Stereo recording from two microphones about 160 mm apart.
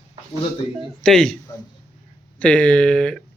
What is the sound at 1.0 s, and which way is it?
Speech, 5° left (ahead or behind).